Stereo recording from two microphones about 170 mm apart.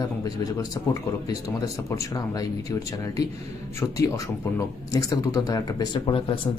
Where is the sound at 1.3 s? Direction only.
20° left (ahead or behind).